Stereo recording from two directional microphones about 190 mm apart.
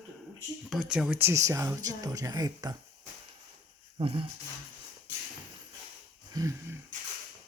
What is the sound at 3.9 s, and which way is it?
Speech, 30° right (ahead or behind).